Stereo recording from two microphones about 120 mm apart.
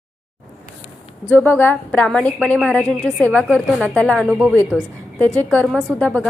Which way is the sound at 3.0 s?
5° left (ahead or behind).